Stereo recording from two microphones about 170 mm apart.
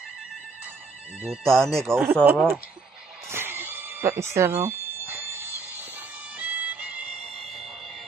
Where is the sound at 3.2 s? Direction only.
15° right (ahead or behind).